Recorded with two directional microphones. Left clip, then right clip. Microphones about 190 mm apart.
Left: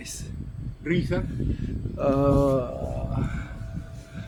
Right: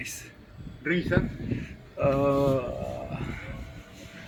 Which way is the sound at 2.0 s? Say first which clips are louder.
Left 2 dB; 30° left (ahead or behind).